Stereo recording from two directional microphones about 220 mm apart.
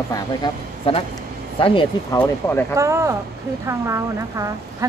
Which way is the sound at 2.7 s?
15° right (ahead or behind).